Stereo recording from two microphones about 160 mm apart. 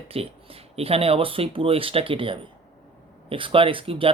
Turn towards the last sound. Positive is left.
turn(degrees=-35)  # may be behind; listen again after turning